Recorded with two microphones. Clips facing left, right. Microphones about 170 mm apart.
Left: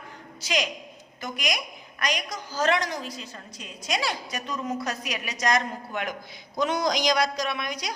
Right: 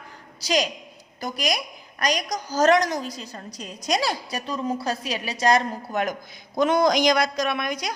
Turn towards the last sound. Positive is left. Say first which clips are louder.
# right 4 dB
turn(degrees=-50)  # may be behind; listen again after turning